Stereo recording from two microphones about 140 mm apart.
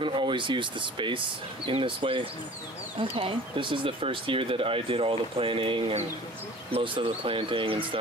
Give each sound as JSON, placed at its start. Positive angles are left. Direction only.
{"t": 0.0, "sound": "speech", "side_deg": -35}